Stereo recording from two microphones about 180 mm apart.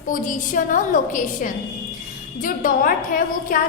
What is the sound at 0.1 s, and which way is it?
A woman's voice, 50° left (ahead or behind).